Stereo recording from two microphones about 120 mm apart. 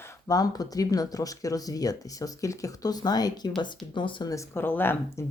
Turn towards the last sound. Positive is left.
turn(degrees=15)  # may be behind; listen again after turning